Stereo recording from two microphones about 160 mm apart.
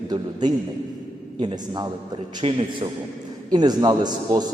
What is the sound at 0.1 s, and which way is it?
A man's voice, 25° right (ahead or behind).